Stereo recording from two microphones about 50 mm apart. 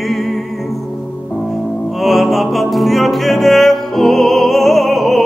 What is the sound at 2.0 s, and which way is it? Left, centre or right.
Music, centre.